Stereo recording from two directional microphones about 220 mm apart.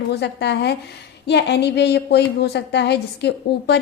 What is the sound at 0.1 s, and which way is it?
A woman's voice, 50° left (ahead or behind).